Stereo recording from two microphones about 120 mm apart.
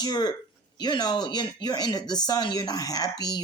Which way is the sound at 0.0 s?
35° left (ahead or behind).